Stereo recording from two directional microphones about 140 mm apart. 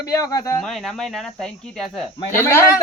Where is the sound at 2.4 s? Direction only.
15° left (ahead or behind).